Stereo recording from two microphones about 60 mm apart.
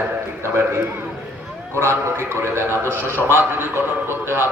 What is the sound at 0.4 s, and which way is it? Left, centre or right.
A man's voice, right.